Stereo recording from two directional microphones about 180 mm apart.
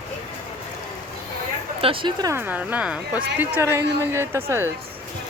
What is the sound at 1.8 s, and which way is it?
Speech, 30° right (ahead or behind).